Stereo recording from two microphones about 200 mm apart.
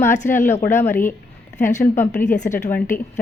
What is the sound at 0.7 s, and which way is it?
Speech, 10° left (ahead or behind).